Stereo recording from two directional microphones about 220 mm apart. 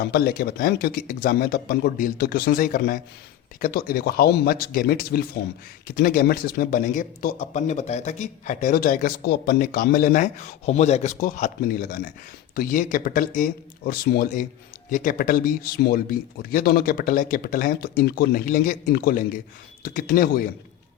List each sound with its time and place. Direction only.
0.0 s speech: 45° left (ahead or behind)